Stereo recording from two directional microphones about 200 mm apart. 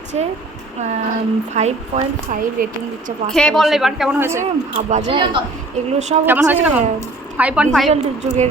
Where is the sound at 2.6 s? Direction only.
45° right (ahead or behind).